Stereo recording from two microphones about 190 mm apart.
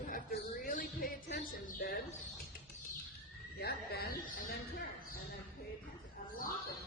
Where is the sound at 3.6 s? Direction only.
55° left (ahead or behind).